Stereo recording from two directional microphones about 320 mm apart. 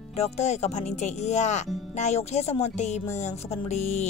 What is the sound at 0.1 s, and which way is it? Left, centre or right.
A woman's voice, left.